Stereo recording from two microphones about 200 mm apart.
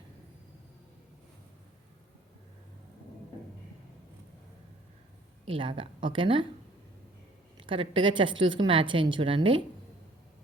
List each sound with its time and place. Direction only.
5.5 s a woman's voice: 25° right (ahead or behind)
7.7 s a woman's voice: 25° right (ahead or behind)